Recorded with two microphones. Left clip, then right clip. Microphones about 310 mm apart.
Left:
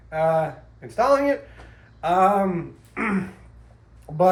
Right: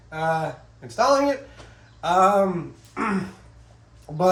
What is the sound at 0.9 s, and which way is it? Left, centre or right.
Speech, centre.